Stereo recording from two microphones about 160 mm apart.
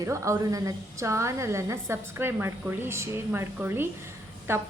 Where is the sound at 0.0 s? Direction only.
20° right (ahead or behind).